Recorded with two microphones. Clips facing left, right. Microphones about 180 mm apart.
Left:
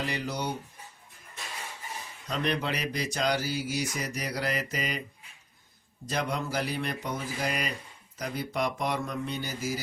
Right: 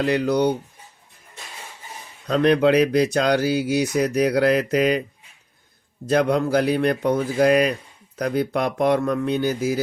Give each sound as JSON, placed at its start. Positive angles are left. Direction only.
{"t": 0.0, "sound": "speech", "side_deg": -65}
{"t": 2.2, "sound": "speech", "side_deg": -70}
{"t": 6.1, "sound": "speech", "side_deg": -65}